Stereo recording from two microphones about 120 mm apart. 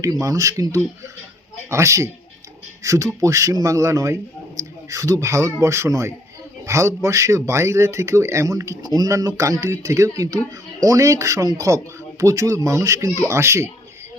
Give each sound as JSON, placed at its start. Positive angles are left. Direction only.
{"t": 0.0, "sound": "speech", "side_deg": -25}